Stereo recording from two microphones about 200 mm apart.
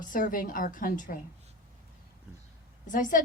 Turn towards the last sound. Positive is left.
turn(degrees=40)  # may be behind; listen again after turning